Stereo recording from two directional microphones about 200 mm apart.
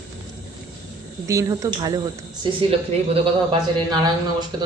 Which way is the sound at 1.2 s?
15° right (ahead or behind).